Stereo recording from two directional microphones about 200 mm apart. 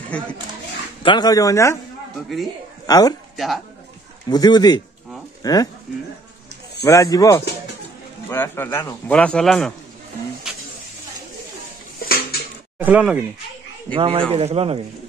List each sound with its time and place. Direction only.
0.1 s speech: 5° left (ahead or behind)
1.0 s a man's voice: 20° left (ahead or behind)
2.9 s speech: 20° left (ahead or behind)
3.3 s speech: centre (ahead or behind)
4.3 s speech: 20° left (ahead or behind)
6.9 s a man's voice: 15° left (ahead or behind)
12.0 s dishes: 45° left (ahead or behind)
12.7 s speech: 10° right (ahead or behind)
13.9 s speech: 30° right (ahead or behind)